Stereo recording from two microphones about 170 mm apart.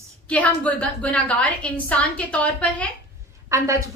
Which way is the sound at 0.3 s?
10° left (ahead or behind).